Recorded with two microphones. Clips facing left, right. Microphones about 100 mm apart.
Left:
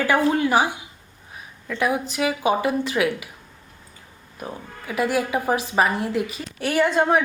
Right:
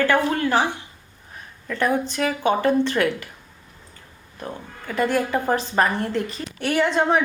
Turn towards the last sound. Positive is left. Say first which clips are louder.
# left 1 dB
turn(degrees=5)  # may be behind; listen again after turning